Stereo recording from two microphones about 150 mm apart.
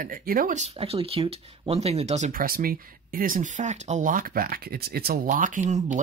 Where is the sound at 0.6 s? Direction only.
40° right (ahead or behind).